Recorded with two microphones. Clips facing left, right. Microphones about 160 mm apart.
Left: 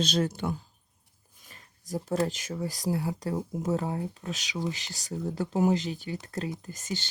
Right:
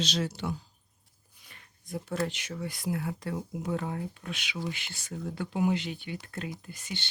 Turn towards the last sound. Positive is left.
turn(degrees=40)  # may be behind; listen again after turning